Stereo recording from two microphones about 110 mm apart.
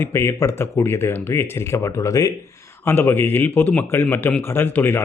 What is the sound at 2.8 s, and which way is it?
Speech, 20° left (ahead or behind).